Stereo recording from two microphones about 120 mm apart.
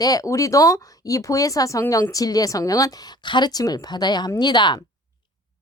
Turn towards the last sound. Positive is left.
turn(degrees=35)  # may be behind; listen again after turning